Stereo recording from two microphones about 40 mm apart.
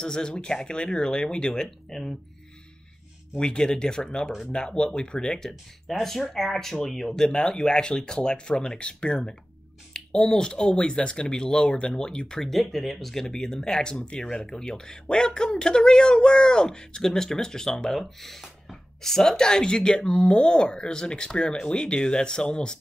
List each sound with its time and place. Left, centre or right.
0.0 s speech: left
3.3 s speech: centre
5.9 s speech: centre
7.3 s speech: centre
12.4 s speech: centre; by 22.8 s left